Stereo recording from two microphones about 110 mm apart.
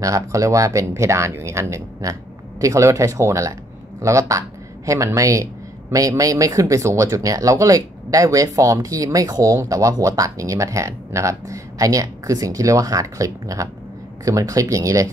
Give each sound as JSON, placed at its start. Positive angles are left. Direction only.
{"t": 0.0, "sound": "speech", "side_deg": -30}